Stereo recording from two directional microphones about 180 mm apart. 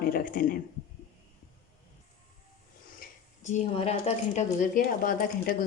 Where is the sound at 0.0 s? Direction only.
55° left (ahead or behind).